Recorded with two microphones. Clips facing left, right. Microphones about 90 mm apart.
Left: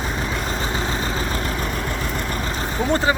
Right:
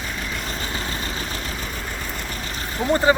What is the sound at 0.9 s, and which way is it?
Vehicle, 35° left (ahead or behind).